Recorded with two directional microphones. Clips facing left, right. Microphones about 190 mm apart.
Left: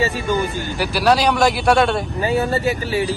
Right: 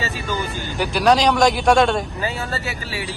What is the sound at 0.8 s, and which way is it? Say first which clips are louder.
A man's voice: even; 5° left (ahead or behind).